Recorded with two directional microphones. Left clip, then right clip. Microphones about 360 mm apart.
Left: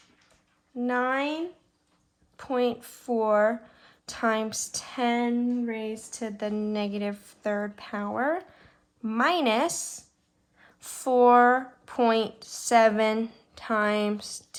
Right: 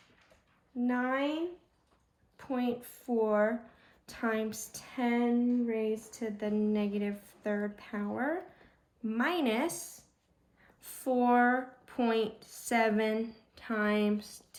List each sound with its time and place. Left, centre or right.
0.9 s speech: centre
2.3 s a woman's voice: centre
10.8 s a woman's voice: centre